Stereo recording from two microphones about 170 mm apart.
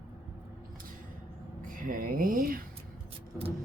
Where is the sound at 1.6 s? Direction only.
50° right (ahead or behind).